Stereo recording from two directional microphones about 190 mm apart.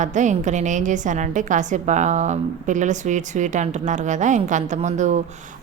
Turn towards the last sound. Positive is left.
turn(degrees=-40)  # may be behind; listen again after turning